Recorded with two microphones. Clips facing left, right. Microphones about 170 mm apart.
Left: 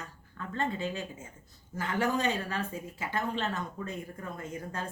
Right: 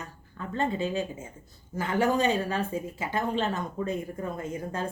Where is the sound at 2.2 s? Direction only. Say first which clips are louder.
Right 5 dB; 25° right (ahead or behind).